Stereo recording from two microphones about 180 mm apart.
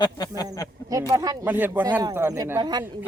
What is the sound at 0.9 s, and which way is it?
Speech, 20° right (ahead or behind).